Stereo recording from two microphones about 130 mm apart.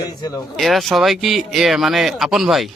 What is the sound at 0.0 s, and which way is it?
Speech, 30° left (ahead or behind).